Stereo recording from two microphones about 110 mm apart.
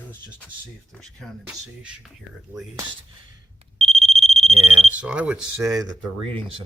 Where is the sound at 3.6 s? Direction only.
70° right (ahead or behind).